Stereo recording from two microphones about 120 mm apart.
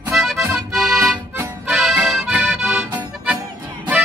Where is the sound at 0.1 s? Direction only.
Centre (ahead or behind).